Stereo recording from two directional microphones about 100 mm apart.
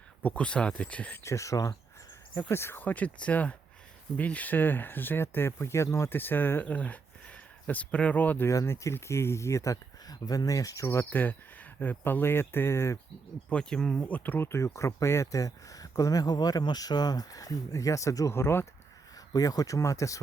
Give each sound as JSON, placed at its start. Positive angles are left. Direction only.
{"t": 0.2, "sound": "speech", "side_deg": 15}
{"t": 1.2, "sound": "speech", "side_deg": 30}
{"t": 8.4, "sound": "speech", "side_deg": 30}
{"t": 13.5, "sound": "speech", "side_deg": 10}
{"t": 19.3, "sound": "speech", "side_deg": 40}